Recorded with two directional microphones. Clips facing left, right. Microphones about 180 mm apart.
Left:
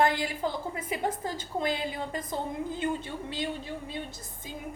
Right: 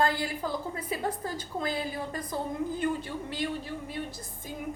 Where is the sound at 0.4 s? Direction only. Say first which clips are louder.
Left 1 dB; 25° left (ahead or behind).